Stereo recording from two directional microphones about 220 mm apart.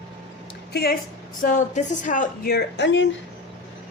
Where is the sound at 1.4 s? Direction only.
35° left (ahead or behind); by 3.1 s 55° left (ahead or behind).